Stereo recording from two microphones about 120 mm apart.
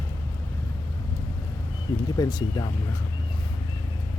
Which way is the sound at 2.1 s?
30° left (ahead or behind).